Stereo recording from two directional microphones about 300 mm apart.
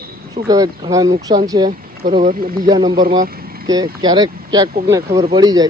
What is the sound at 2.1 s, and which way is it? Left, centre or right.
Speech, right.